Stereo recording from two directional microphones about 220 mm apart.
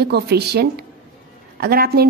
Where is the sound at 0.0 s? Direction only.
45° right (ahead or behind).